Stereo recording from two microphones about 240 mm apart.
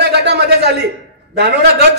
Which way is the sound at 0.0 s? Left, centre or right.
Right.